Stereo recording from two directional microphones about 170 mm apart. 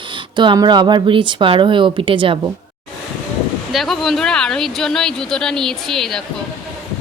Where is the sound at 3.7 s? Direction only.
Centre (ahead or behind).